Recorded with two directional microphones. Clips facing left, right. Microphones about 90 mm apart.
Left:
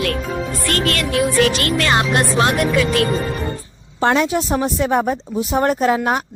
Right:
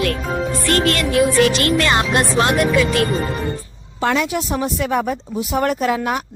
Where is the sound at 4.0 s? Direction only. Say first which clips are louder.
Left 3 dB; 30° left (ahead or behind).